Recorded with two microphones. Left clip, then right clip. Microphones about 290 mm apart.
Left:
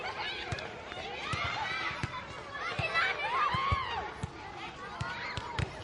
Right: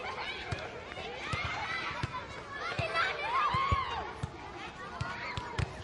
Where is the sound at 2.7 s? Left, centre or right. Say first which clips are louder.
Left 1 dB; right.